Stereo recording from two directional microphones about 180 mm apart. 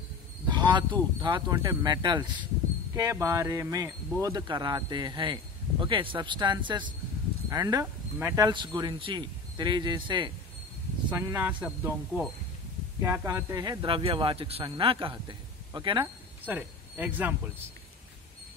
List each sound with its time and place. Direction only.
0.5 s a sound: 25° right (ahead or behind)
1.2 s speech: 25° right (ahead or behind)
11.1 s speech: 15° right (ahead or behind)
16.4 s speech: 10° right (ahead or behind)